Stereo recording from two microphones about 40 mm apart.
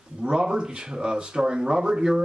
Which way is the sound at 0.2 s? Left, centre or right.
Right.